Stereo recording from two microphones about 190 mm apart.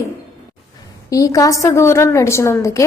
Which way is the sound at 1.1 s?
20° left (ahead or behind).